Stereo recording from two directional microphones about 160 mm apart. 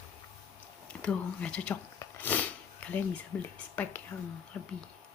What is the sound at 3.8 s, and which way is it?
Speech, 10° left (ahead or behind).